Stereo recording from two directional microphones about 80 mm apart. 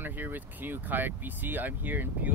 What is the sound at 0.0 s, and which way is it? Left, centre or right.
Speech, right.